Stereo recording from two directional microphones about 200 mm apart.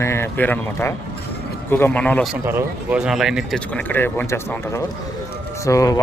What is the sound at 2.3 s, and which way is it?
A man's voice, 10° right (ahead or behind).